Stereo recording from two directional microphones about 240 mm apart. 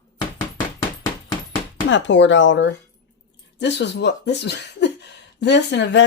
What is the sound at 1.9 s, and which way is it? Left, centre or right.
Speech, left.